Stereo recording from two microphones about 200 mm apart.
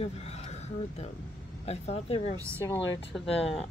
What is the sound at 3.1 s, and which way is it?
Speech, centre (ahead or behind).